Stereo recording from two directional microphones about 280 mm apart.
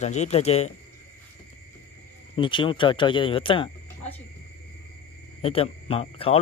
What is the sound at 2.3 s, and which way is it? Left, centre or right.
Speech, centre.